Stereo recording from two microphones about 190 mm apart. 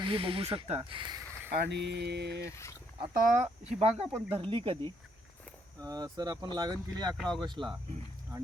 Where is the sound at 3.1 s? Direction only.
45° right (ahead or behind).